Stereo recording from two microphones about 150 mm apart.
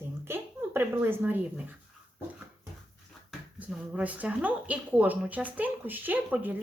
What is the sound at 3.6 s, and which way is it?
A woman's voice, 10° right (ahead or behind).